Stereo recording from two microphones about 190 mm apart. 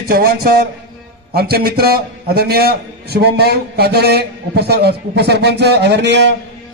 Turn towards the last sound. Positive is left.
turn(degrees=-65)  # may be behind; listen again after turning